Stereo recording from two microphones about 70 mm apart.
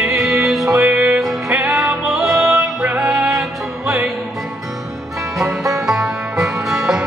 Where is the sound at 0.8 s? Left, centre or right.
Centre.